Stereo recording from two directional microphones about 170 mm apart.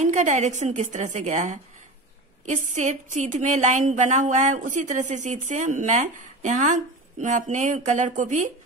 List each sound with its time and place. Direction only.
0.0 s a woman's voice: 45° right (ahead or behind)